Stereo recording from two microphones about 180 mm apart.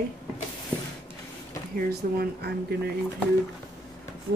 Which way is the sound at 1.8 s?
60° right (ahead or behind).